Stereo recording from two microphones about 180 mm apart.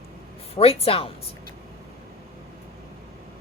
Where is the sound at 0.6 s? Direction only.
30° left (ahead or behind).